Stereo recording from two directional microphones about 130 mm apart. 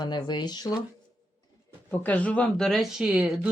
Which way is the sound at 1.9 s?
15° left (ahead or behind).